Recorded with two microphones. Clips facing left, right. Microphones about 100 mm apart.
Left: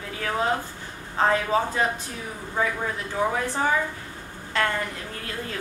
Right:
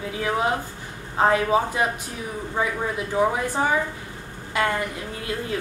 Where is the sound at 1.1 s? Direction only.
15° right (ahead or behind).